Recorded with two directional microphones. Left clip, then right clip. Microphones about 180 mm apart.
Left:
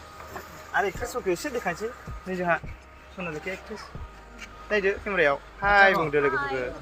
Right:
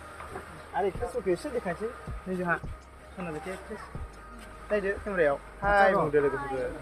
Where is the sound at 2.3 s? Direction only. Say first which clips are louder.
Left 4 dB; 30° left (ahead or behind).